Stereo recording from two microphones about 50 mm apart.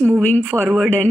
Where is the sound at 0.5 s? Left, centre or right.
Right.